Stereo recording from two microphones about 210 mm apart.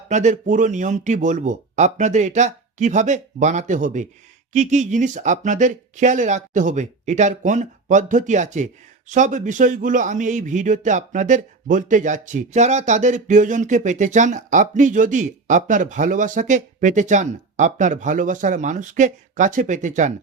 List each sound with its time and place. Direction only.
0.1 s speech: 35° right (ahead or behind)